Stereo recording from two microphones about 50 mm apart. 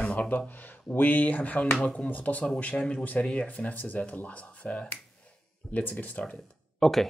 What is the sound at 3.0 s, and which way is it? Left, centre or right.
Speech, left.